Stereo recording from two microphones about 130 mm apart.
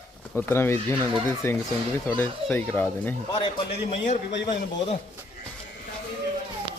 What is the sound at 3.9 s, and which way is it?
Speech, 60° left (ahead or behind).